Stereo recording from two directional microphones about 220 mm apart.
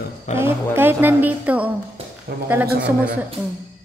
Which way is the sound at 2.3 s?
45° right (ahead or behind).